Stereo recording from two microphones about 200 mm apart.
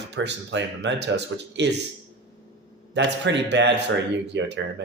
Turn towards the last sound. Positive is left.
turn(degrees=-60)  # may be behind; listen again after turning